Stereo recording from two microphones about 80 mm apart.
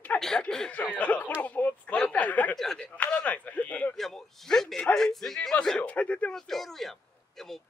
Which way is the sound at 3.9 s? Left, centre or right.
Centre.